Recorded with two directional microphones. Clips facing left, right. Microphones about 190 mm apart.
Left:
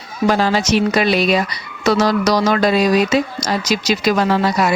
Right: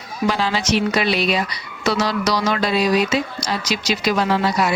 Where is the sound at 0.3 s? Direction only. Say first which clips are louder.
Left 5 dB; 45° left (ahead or behind).